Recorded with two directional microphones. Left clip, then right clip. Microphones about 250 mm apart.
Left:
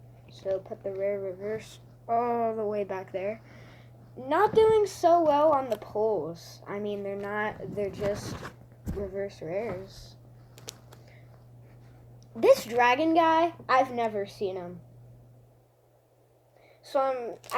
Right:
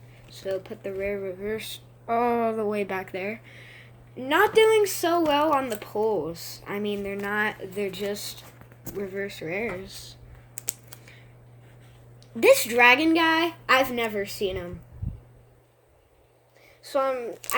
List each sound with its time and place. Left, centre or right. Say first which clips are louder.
0.3 s a woman's voice: even; right
12.4 s a woman's voice: right 4 dB; right
16.8 s a woman's voice: right 2 dB; right